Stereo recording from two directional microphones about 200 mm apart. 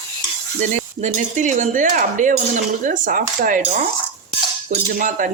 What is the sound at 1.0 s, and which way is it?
Speech, 40° right (ahead or behind).